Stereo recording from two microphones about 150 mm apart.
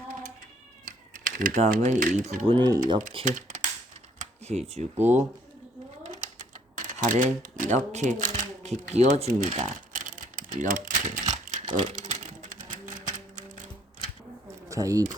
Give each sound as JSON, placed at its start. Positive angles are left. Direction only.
{"t": 1.1, "sound": "typing", "side_deg": -65}
{"t": 1.7, "sound": "speech", "side_deg": -60}
{"t": 2.5, "sound": "speech", "side_deg": -30}
{"t": 3.2, "sound": "typing", "side_deg": -55}
{"t": 4.2, "sound": "a sound", "side_deg": -45}
{"t": 4.7, "sound": "speech", "side_deg": -50}
{"t": 6.0, "sound": "typewriter", "side_deg": -60}
{"t": 8.9, "sound": "speech", "side_deg": -50}
{"t": 11.5, "sound": "typewriter", "side_deg": -55}
{"t": 14.7, "sound": "speech", "side_deg": -20}